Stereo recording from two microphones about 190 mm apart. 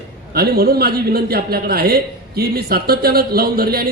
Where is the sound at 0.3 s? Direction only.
55° right (ahead or behind).